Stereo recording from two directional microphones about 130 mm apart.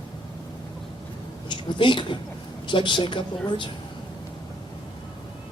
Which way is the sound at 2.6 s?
40° left (ahead or behind).